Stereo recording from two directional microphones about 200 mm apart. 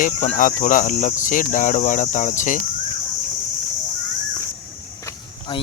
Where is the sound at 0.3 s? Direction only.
40° left (ahead or behind).